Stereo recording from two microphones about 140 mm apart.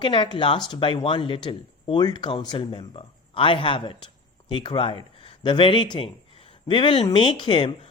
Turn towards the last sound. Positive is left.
turn(degrees=35)  # may be behind; listen again after turning